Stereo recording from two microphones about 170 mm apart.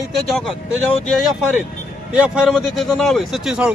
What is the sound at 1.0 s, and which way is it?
A man's voice, centre (ahead or behind).